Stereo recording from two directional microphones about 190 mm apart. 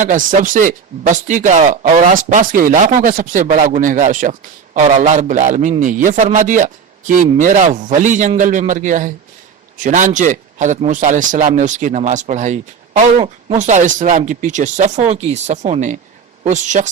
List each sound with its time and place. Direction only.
0.0 s speech: 45° right (ahead or behind)